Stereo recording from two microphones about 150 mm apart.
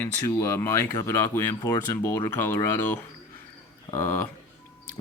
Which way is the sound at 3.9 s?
15° left (ahead or behind).